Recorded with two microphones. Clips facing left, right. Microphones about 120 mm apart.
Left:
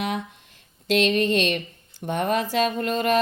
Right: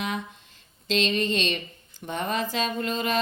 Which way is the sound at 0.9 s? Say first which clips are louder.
Left 5 dB; 60° left (ahead or behind).